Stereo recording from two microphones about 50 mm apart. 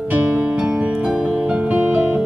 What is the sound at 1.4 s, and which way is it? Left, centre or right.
Music, right.